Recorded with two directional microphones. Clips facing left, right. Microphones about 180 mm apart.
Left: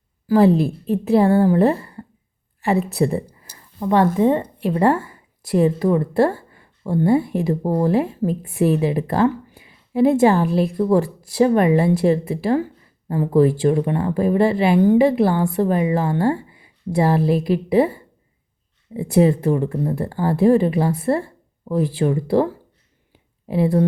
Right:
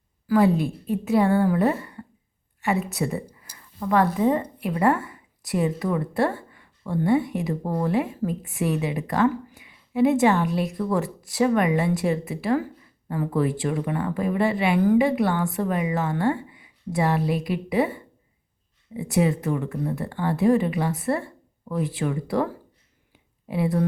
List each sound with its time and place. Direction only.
0.3 s speech: 30° left (ahead or behind)
23.5 s speech: 30° left (ahead or behind)